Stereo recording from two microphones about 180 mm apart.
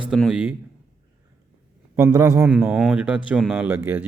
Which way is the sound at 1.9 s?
20° right (ahead or behind).